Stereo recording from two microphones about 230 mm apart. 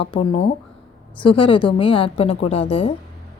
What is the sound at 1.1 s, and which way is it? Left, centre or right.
A woman's voice, left.